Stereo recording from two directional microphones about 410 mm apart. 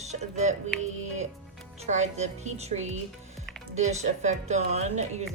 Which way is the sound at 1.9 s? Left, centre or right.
Centre.